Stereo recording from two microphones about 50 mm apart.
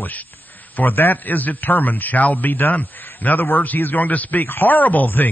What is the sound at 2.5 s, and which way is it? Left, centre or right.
Speech, left.